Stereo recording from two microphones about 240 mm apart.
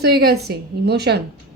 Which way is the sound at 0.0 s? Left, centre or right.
Right.